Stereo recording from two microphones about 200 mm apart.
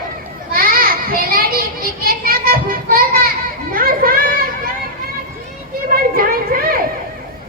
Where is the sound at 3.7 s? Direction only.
45° right (ahead or behind).